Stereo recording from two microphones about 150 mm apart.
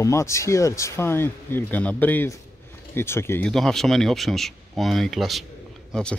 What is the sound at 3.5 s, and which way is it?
Speech, 5° left (ahead or behind).